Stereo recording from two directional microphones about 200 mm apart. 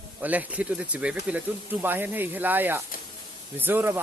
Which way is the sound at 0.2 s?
10° right (ahead or behind).